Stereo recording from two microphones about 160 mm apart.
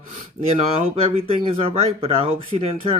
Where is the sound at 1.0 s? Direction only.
35° right (ahead or behind).